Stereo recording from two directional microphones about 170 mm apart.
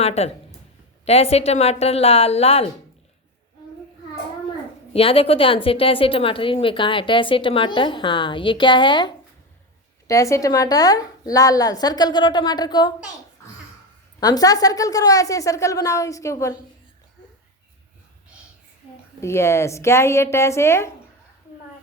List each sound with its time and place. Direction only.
0.0 s a woman's voice: 40° left (ahead or behind)
4.9 s a woman's voice: 35° left (ahead or behind)
14.2 s a woman's voice: 20° left (ahead or behind)
19.2 s a woman's voice: 15° left (ahead or behind)